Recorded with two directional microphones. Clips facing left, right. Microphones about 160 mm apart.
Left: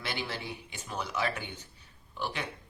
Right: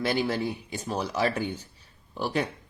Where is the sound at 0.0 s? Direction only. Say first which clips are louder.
Right 11 dB; 40° right (ahead or behind).